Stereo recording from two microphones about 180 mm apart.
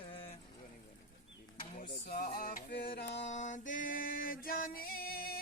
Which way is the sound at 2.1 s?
55° left (ahead or behind).